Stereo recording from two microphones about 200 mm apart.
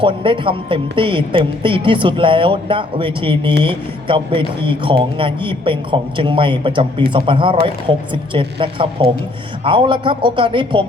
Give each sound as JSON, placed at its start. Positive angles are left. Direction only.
{"t": 0.0, "sound": "speech", "side_deg": -25}